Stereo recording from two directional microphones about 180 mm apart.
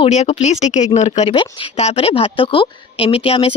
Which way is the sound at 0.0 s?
35° left (ahead or behind).